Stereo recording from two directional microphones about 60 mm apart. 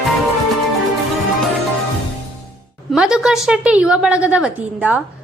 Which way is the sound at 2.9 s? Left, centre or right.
Centre.